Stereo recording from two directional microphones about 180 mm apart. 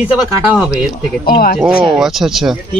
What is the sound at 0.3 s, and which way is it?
Speech, 5° right (ahead or behind).